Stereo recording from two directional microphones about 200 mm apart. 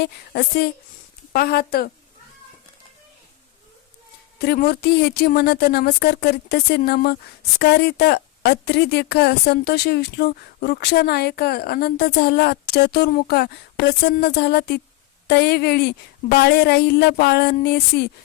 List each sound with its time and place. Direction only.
0.0 s a woman's voice: 55° left (ahead or behind)
4.4 s a woman's voice: 50° left (ahead or behind)